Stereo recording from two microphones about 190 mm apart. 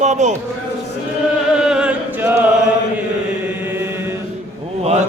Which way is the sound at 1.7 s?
5° right (ahead or behind).